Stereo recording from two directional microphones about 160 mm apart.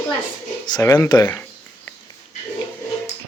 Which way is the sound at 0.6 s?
25° left (ahead or behind).